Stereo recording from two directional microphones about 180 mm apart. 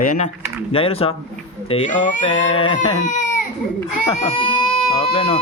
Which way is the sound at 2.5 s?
30° left (ahead or behind).